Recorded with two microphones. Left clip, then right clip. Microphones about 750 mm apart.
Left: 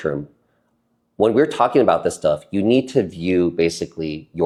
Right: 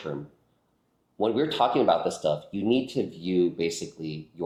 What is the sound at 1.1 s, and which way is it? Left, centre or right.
Speech, left.